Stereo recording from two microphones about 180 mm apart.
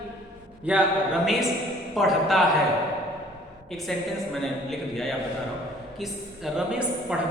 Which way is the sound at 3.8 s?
Centre (ahead or behind).